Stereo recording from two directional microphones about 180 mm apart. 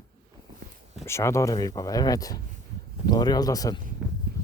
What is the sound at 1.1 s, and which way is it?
Speech, 15° left (ahead or behind).